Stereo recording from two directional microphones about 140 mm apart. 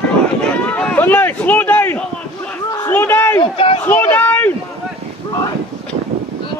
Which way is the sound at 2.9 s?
15° left (ahead or behind).